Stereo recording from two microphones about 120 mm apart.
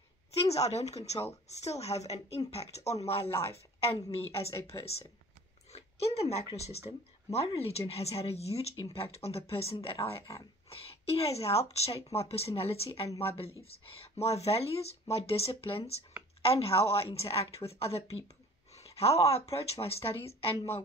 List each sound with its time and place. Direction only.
0.3 s a woman's voice: 60° left (ahead or behind)